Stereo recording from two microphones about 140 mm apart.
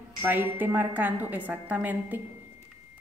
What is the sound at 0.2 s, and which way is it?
A woman's voice, 15° right (ahead or behind).